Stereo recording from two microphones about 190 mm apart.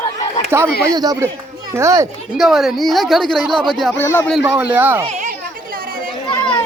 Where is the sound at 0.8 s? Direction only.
20° right (ahead or behind).